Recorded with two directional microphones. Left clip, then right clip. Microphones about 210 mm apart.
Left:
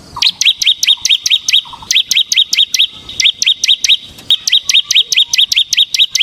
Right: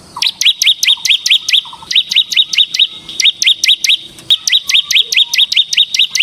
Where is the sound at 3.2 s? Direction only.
5° right (ahead or behind).